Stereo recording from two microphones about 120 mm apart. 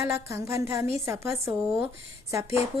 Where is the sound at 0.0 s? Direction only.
20° right (ahead or behind).